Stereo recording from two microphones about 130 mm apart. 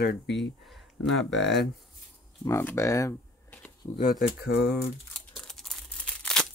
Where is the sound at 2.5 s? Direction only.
20° left (ahead or behind).